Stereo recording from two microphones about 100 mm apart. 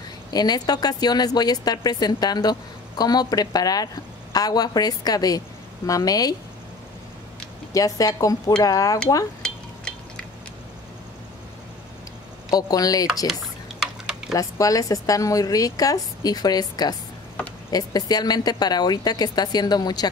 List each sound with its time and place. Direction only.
0.3 s a woman's voice: 40° left (ahead or behind)
7.7 s a woman's voice: 35° left (ahead or behind)
9.4 s a sound: 10° left (ahead or behind)
12.4 s a woman's voice: 40° left (ahead or behind)
13.3 s typing: 5° right (ahead or behind)
14.3 s a woman's voice: 35° left (ahead or behind)